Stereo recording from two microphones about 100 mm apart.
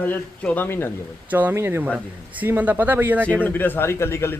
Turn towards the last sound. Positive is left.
turn(degrees=25)  # may be behind; listen again after turning